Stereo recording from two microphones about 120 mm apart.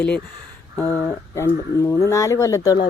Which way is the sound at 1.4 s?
20° left (ahead or behind).